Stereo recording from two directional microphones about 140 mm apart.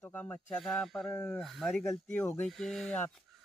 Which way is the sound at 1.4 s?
Centre (ahead or behind).